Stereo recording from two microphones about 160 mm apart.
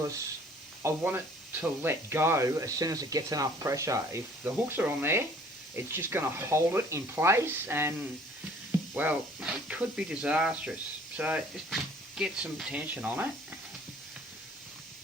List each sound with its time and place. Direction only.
0.8 s speech: 15° right (ahead or behind)